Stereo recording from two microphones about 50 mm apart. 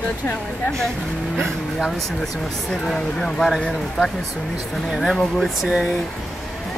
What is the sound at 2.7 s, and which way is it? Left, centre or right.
Speech, centre.